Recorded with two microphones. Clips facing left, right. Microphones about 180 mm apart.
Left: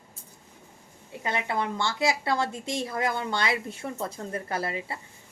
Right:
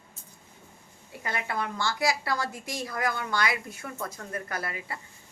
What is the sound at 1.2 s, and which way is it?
A woman's voice, 25° left (ahead or behind).